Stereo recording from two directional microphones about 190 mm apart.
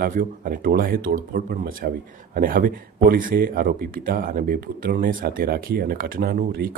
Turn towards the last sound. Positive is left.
turn(degrees=-50)  # may be behind; listen again after turning